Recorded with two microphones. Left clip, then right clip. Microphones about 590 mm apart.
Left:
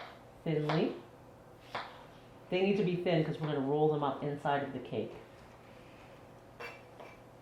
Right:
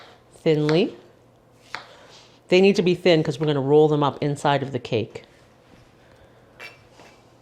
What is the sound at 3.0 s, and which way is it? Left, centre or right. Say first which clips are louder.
Speech: right 14 dB; right.